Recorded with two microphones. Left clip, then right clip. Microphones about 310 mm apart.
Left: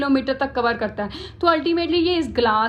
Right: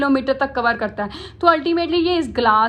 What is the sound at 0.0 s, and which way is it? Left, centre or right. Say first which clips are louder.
A woman's voice: right 3 dB; centre.